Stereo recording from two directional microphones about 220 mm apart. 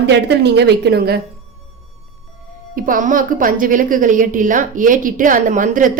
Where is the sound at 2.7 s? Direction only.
40° right (ahead or behind).